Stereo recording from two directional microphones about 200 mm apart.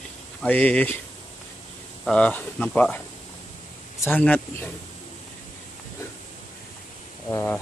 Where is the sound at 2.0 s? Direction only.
5° left (ahead or behind).